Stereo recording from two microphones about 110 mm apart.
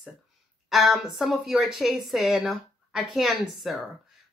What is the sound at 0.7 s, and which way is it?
Speech, centre (ahead or behind).